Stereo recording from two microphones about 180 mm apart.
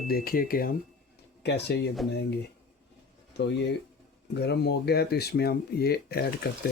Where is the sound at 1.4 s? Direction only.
65° left (ahead or behind).